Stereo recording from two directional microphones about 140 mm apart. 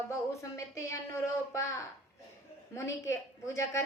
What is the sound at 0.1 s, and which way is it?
A woman's voice, 20° left (ahead or behind).